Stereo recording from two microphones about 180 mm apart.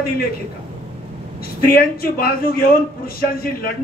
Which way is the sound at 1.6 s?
55° left (ahead or behind).